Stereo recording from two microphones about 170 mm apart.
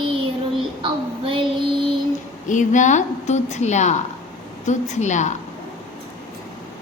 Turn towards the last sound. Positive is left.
turn(degrees=45)  # may be behind; listen again after turning